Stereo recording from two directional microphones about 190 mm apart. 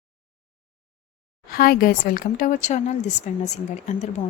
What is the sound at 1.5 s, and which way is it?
A woman's voice, 50° left (ahead or behind).